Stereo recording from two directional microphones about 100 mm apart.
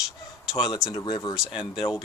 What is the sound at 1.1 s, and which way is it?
Speech, 45° left (ahead or behind).